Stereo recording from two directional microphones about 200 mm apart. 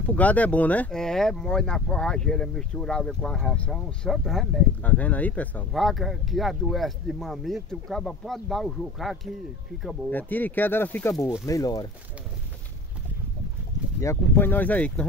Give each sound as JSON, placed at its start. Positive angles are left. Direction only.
{"t": 0.0, "sound": "speech", "side_deg": 5}
{"t": 14.0, "sound": "speech", "side_deg": 10}